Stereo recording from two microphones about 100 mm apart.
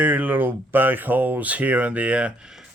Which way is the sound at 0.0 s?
15° right (ahead or behind).